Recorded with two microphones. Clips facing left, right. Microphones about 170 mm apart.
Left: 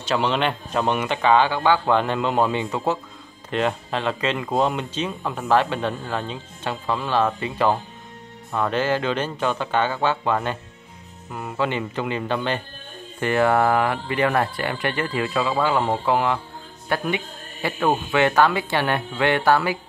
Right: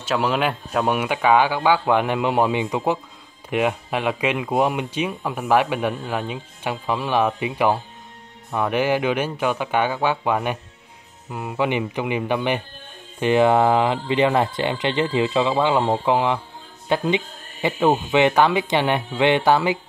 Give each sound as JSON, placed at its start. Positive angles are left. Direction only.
{"t": 0.0, "sound": "speech", "side_deg": -5}